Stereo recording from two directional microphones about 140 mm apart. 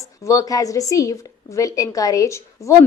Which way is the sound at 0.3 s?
25° left (ahead or behind).